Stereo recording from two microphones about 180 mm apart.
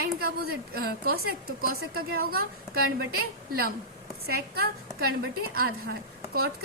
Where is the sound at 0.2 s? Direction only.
60° right (ahead or behind).